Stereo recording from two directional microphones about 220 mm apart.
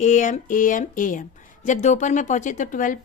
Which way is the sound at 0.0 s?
35° left (ahead or behind).